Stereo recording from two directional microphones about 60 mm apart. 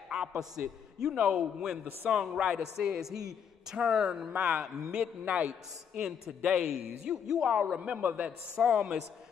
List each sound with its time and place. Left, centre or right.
0.1 s a man's voice: centre
4.9 s a man's voice: right
5.9 s a man's voice: centre